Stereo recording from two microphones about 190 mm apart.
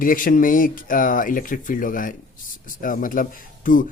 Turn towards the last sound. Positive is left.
turn(degrees=45)  # may be behind; listen again after turning